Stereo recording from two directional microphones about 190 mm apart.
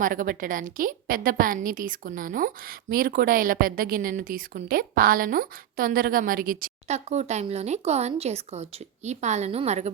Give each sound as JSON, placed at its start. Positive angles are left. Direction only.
{"t": 0.0, "sound": "a woman's voice", "side_deg": -45}